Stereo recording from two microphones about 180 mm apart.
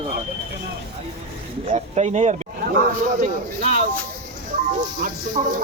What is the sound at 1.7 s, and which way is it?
Speech, 40° right (ahead or behind).